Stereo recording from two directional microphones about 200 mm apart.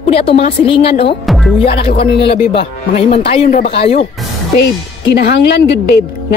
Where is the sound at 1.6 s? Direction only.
30° left (ahead or behind).